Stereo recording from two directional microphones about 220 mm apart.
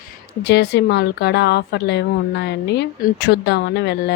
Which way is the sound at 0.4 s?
50° left (ahead or behind).